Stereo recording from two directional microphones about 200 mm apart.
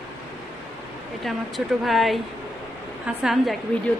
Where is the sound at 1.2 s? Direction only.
Centre (ahead or behind).